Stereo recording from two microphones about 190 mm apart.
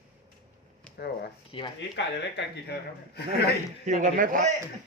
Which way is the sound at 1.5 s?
30° left (ahead or behind).